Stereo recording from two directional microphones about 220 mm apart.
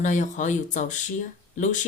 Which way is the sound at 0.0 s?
35° left (ahead or behind).